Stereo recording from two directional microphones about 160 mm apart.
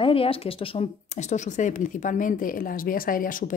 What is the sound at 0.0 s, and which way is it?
Speech, 35° left (ahead or behind).